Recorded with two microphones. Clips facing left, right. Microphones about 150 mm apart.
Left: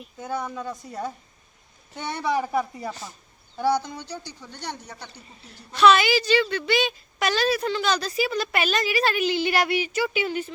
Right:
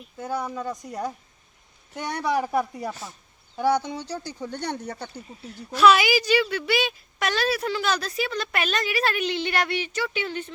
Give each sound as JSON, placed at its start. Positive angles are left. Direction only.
{"t": 0.3, "sound": "a woman's voice", "side_deg": -5}
{"t": 2.0, "sound": "speech", "side_deg": -10}
{"t": 4.0, "sound": "speech", "side_deg": -45}
{"t": 5.5, "sound": "a woman's voice", "side_deg": -5}